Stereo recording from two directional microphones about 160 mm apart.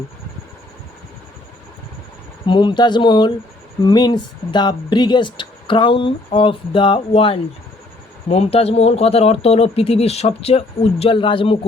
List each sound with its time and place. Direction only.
2.5 s speech: 30° left (ahead or behind)